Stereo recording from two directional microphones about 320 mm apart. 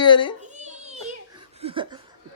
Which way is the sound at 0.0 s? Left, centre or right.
Centre.